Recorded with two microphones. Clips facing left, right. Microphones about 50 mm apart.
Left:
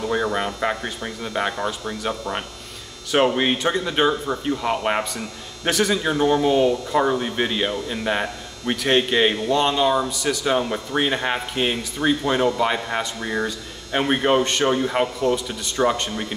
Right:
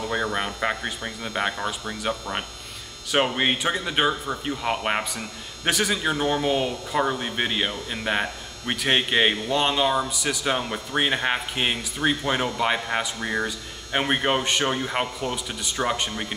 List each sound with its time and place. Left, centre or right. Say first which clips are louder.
0.0 s a man's voice: left 3 dB; centre